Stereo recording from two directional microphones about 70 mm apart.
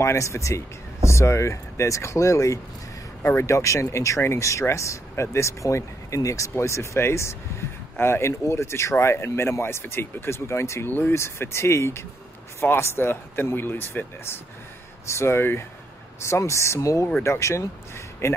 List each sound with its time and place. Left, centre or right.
0.0 s speech: left
10.9 s speech: left
11.1 s speech: left